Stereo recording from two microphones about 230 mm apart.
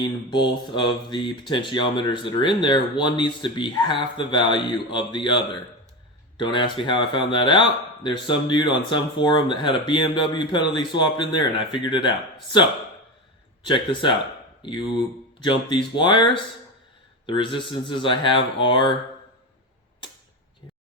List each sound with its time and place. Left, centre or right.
0.0 s speech: centre
13.7 s speech: left